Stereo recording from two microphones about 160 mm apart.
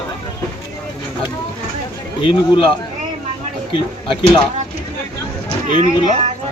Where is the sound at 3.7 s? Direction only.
30° left (ahead or behind).